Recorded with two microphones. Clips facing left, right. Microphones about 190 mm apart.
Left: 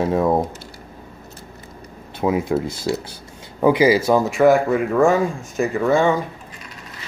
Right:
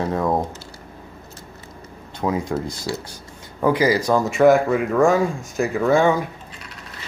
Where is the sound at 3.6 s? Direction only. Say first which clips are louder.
Left 3 dB; 10° left (ahead or behind).